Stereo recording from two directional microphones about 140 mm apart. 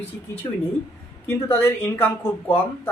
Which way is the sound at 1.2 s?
15° left (ahead or behind).